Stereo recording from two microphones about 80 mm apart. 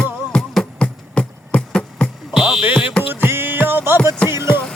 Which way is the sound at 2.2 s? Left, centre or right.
Centre.